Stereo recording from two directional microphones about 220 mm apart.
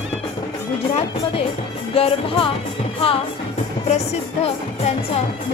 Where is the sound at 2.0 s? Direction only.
25° left (ahead or behind).